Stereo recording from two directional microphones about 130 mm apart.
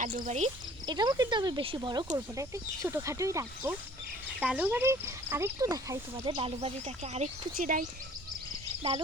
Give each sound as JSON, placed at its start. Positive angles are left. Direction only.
{"t": 0.0, "sound": "insect", "side_deg": -70}
{"t": 0.9, "sound": "speech", "side_deg": -35}
{"t": 2.1, "sound": "speech", "side_deg": -25}
{"t": 4.4, "sound": "speech", "side_deg": -10}
{"t": 6.2, "sound": "speech", "side_deg": -45}
{"t": 7.5, "sound": "speech", "side_deg": -90}